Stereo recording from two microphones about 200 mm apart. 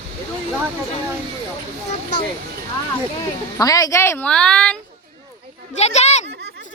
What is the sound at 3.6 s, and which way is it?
A woman's voice, 15° left (ahead or behind).